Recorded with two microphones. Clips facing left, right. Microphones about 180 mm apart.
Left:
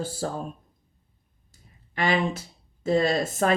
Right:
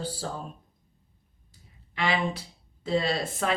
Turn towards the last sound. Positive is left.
turn(degrees=45)  # may be behind; listen again after turning